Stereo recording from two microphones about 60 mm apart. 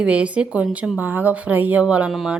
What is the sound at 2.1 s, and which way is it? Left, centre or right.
Speech, centre.